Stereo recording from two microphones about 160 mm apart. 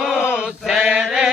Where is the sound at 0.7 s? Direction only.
5° right (ahead or behind).